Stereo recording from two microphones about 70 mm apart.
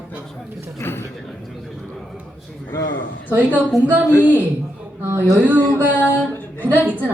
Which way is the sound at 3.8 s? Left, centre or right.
Centre.